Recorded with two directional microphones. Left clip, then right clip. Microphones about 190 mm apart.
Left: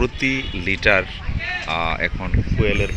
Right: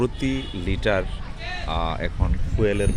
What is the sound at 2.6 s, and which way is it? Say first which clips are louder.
Speech: left 1 dB; 30° right (ahead or behind).